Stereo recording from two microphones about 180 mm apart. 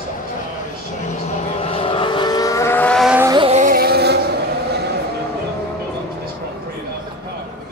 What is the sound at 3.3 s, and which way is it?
Vehicle, 25° right (ahead or behind).